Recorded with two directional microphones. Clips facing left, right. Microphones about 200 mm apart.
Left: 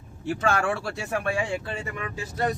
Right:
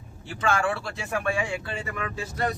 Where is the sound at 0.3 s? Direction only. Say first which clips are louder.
Left 1 dB; 40° left (ahead or behind).